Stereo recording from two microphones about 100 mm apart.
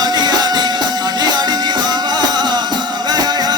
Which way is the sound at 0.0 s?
45° right (ahead or behind).